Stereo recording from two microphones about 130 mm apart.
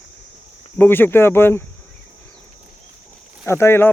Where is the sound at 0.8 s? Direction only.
15° left (ahead or behind).